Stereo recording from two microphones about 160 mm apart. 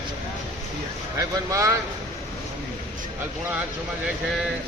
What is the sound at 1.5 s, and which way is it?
Speech, 20° right (ahead or behind).